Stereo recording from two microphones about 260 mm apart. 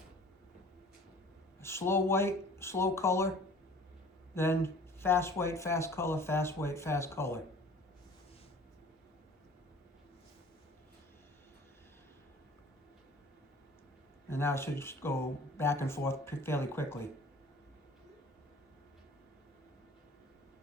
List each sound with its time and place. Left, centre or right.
1.6 s speech: centre
4.4 s speech: centre
14.3 s speech: centre